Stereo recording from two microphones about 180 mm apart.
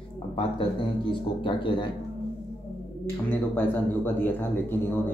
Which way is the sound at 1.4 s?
25° left (ahead or behind).